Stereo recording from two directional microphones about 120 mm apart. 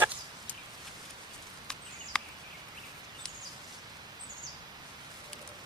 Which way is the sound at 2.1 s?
5° left (ahead or behind).